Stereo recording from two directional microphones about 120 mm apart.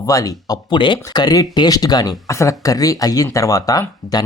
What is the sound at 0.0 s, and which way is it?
Speech, 30° left (ahead or behind).